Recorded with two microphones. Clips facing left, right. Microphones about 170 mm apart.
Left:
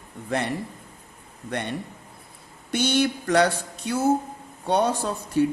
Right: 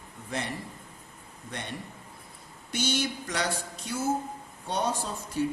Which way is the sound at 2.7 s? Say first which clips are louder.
Left 7 dB; 60° left (ahead or behind).